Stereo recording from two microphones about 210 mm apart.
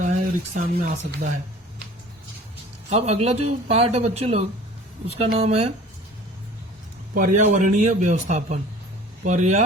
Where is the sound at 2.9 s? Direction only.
30° right (ahead or behind).